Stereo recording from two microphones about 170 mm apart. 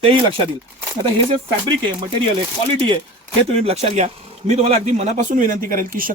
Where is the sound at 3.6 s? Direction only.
40° right (ahead or behind).